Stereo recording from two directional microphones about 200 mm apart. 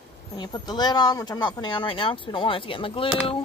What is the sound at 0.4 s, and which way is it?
Speech, 20° left (ahead or behind).